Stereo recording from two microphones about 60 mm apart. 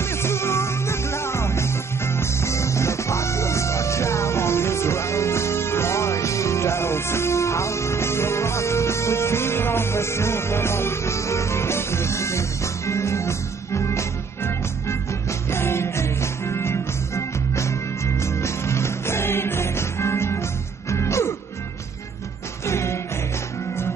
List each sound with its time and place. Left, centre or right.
0.0 s music: left
22.7 s music: left